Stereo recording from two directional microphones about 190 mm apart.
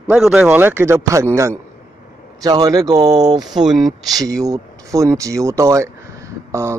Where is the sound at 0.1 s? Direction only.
5° right (ahead or behind).